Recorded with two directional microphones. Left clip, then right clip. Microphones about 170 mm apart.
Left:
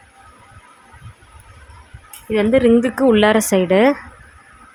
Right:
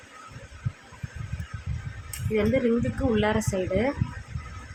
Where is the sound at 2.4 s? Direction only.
60° left (ahead or behind).